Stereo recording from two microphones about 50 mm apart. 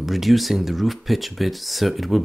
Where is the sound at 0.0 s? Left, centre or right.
Centre.